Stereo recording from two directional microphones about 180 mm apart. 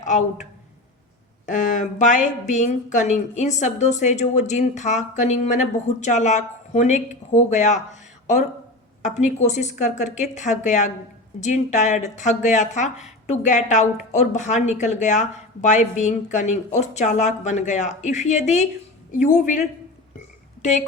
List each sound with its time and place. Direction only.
0.0 s a man's voice: 40° left (ahead or behind)
1.5 s a woman's voice: 45° left (ahead or behind)